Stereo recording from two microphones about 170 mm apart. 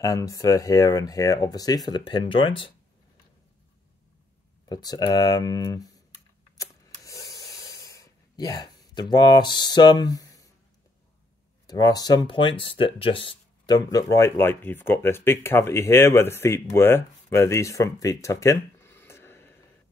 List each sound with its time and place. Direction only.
0.0 s speech: 20° left (ahead or behind)
4.6 s speech: 25° left (ahead or behind)
6.6 s a sound: 20° left (ahead or behind)
11.6 s speech: 20° left (ahead or behind)